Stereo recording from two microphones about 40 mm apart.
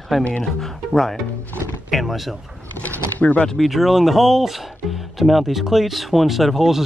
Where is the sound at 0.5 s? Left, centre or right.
Centre.